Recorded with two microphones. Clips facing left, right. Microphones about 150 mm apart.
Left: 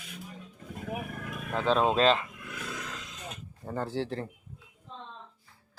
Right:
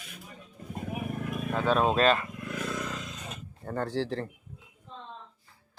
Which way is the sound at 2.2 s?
45° right (ahead or behind).